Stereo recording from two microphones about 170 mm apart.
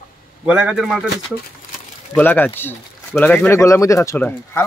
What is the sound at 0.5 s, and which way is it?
Speech, 5° right (ahead or behind).